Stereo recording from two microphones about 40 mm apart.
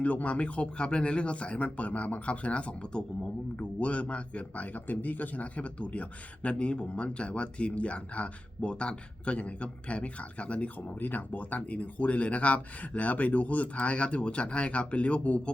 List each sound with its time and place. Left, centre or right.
0.0 s speech: left